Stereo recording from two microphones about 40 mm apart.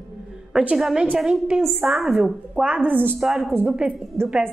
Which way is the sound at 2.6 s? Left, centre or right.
Right.